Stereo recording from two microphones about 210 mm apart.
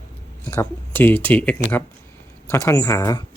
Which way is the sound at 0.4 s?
10° left (ahead or behind).